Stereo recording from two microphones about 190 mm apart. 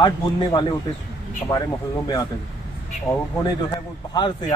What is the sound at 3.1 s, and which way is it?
Speech, 15° left (ahead or behind).